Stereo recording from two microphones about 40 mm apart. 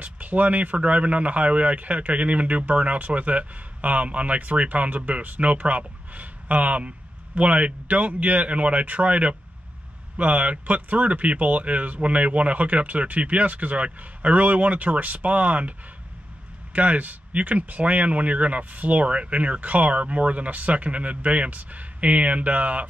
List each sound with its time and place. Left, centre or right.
0.0 s speech: right
16.7 s speech: right